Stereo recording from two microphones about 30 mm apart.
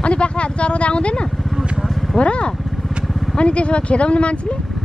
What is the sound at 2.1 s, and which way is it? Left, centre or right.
Vehicle, left.